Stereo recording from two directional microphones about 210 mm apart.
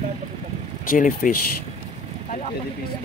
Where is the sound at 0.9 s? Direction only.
40° left (ahead or behind).